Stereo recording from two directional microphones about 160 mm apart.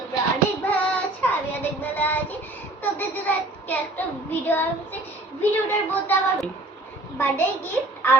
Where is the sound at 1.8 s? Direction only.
10° left (ahead or behind).